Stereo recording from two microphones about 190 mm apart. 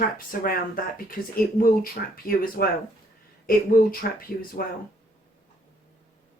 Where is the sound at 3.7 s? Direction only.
50° left (ahead or behind).